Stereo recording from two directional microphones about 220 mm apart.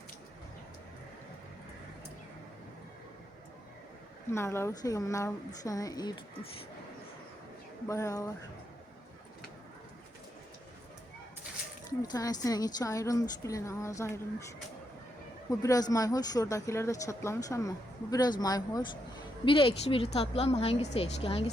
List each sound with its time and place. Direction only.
4.3 s speech: 10° left (ahead or behind)
7.9 s speech: 15° left (ahead or behind)
12.0 s speech: 15° left (ahead or behind)
15.4 s a woman's voice: 15° left (ahead or behind)